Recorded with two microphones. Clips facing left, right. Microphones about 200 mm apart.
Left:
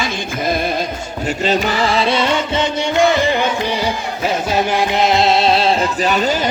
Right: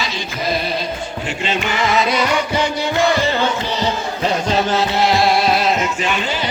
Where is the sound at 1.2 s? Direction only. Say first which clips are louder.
Left 6 dB; 40° left (ahead or behind).